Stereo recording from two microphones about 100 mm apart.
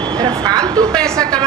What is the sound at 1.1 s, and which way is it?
Speech, 35° right (ahead or behind).